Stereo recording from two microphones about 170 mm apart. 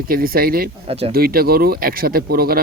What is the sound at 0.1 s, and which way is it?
Speech, 60° right (ahead or behind).